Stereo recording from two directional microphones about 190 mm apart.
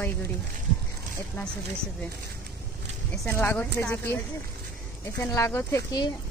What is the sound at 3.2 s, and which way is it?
Speech, 10° left (ahead or behind).